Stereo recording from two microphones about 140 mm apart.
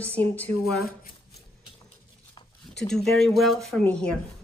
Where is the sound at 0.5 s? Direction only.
90° left.